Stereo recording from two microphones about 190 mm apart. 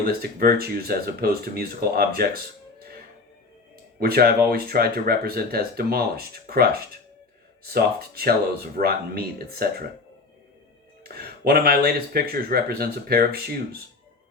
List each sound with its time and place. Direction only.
0.0 s speech: 50° right (ahead or behind)
4.0 s speech: 55° right (ahead or behind)
7.7 s speech: 50° right (ahead or behind)
11.0 s speech: 55° right (ahead or behind)